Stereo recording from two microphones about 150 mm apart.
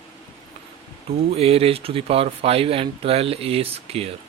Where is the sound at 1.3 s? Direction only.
40° right (ahead or behind).